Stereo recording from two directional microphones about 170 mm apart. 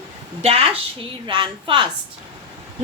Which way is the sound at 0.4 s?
35° right (ahead or behind).